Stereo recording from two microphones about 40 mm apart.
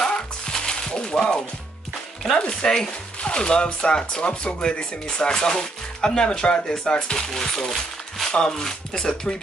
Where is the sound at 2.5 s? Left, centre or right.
Centre.